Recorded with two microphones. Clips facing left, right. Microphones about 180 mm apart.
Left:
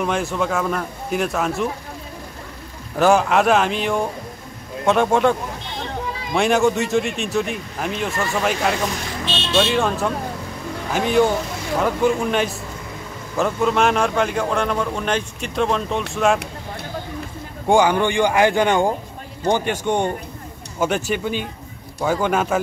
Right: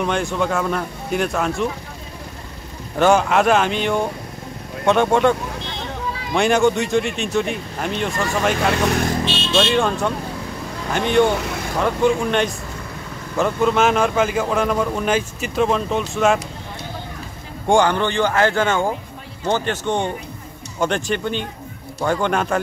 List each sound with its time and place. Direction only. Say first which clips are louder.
0.0 s speech: right 1 dB; centre (ahead or behind)
3.0 s speech: even; centre (ahead or behind)
8.7 s speech: right 5 dB; 70° right (ahead or behind)
9.6 s speech: even; centre (ahead or behind)
17.6 s speech: left 1 dB; 10° left (ahead or behind)